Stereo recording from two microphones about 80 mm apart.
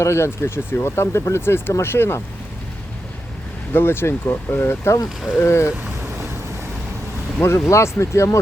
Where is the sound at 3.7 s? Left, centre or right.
Left.